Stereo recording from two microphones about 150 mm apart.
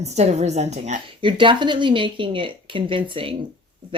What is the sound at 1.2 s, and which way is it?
Speech, 35° right (ahead or behind).